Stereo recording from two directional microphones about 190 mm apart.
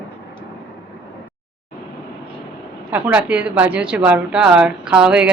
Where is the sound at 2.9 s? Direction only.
10° right (ahead or behind).